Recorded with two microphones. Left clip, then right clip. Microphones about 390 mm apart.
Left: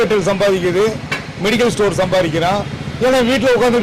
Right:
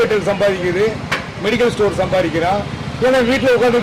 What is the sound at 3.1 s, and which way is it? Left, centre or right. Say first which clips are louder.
Speech: even; left.